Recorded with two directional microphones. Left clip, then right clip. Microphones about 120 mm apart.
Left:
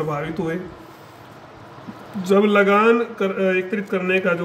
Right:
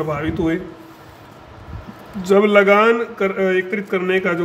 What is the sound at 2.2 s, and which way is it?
A man's voice, 45° right (ahead or behind).